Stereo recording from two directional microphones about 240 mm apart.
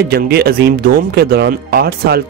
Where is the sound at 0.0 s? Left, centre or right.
Right.